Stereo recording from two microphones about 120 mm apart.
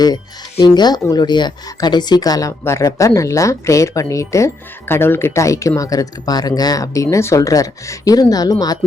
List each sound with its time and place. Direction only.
0.6 s speech: 35° left (ahead or behind)